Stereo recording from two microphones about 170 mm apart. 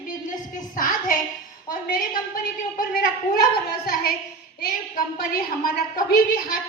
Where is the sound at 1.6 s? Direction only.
55° left (ahead or behind).